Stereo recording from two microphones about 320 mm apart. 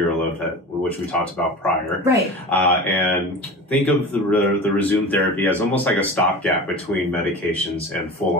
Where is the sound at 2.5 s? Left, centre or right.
Centre.